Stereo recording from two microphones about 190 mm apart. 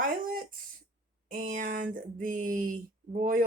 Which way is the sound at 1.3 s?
40° right (ahead or behind).